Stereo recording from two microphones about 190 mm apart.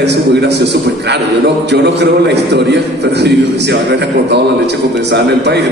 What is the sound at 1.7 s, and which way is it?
A man's voice, 65° right (ahead or behind).